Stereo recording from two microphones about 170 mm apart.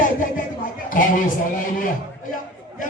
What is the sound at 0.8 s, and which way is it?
Speech, 50° left (ahead or behind).